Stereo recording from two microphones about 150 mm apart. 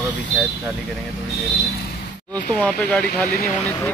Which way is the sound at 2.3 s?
10° left (ahead or behind).